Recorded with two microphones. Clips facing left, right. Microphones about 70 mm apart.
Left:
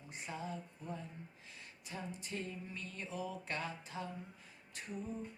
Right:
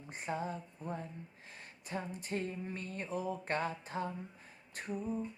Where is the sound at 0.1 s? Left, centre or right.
Right.